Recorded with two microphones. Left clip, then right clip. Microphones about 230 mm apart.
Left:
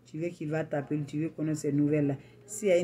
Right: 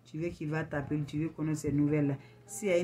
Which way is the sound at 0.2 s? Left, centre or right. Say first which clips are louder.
Left 3 dB; centre.